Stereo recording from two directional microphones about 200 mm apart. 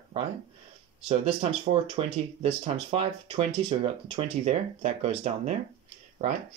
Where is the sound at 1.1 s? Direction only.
30° right (ahead or behind).